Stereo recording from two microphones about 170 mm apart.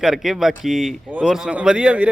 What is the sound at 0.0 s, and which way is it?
Speech, centre (ahead or behind).